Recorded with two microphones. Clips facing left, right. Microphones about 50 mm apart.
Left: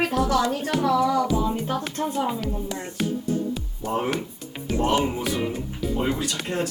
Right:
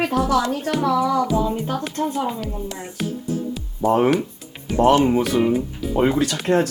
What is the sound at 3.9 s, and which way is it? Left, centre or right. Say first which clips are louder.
Speech: right 9 dB; right.